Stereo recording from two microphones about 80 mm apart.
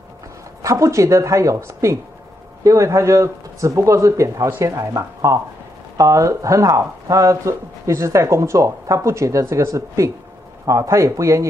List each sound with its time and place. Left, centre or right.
0.6 s speech: right